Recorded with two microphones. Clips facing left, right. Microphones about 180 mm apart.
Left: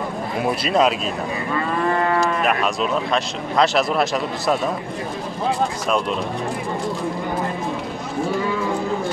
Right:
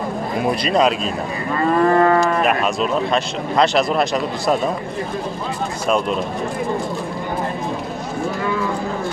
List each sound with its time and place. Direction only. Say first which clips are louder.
0.5 s speech: right 1 dB; 5° left (ahead or behind)
1.8 s moo: right 6 dB; 45° right (ahead or behind)
2.4 s speech: right 2 dB; centre (ahead or behind)